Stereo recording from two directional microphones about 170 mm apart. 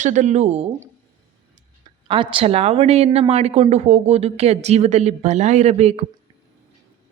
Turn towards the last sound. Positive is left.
turn(degrees=-40)  # may be behind; listen again after turning